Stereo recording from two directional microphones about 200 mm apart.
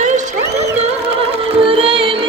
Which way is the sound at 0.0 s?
40° right (ahead or behind).